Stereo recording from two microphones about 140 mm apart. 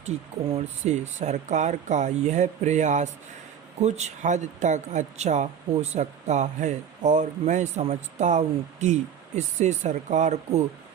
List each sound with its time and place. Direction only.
0.5 s speech: 55° right (ahead or behind)